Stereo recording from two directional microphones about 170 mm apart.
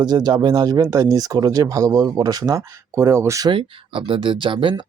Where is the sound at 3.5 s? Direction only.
30° right (ahead or behind).